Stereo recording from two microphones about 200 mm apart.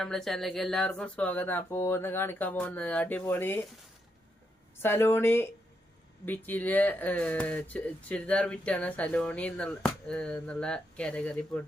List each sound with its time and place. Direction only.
0.0 s speech: centre (ahead or behind)
4.8 s speech: 10° left (ahead or behind)